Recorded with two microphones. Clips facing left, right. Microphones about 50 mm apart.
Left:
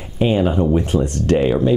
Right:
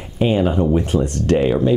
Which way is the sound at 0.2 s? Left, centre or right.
Centre.